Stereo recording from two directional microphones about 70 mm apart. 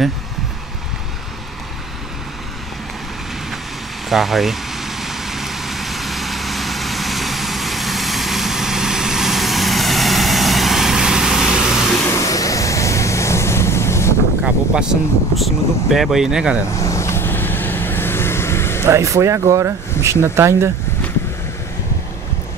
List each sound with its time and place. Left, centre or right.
4.1 s vehicle: centre
12.1 s vehicle: left
14.4 s speech: centre
15.3 s speech: centre
16.7 s vehicle: left
18.9 s speech: right